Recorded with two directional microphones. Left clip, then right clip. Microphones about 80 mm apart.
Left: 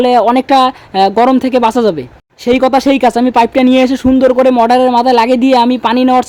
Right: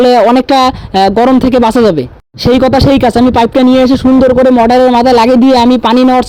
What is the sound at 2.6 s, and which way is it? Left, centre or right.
Speech, right.